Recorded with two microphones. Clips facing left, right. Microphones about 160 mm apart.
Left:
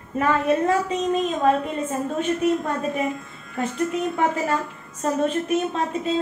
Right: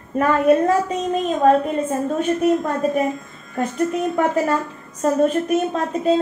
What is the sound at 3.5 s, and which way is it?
A woman's voice, 45° right (ahead or behind).